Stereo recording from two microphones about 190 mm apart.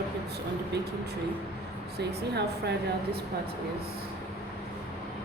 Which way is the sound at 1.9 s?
60° right (ahead or behind).